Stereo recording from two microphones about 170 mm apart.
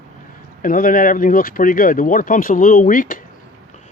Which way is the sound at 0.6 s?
55° left (ahead or behind).